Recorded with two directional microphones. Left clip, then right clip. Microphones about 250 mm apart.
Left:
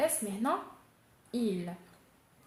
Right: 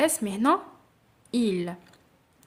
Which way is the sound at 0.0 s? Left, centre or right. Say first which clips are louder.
Right 7 dB; right.